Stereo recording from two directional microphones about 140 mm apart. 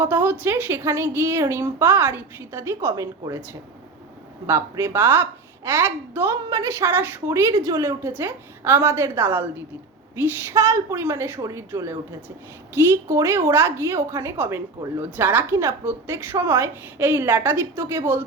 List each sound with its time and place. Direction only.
0.0 s a woman's voice: 15° right (ahead or behind)
4.4 s a woman's voice: 20° right (ahead or behind)